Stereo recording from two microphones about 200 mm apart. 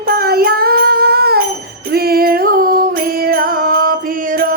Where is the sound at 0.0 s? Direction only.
50° right (ahead or behind).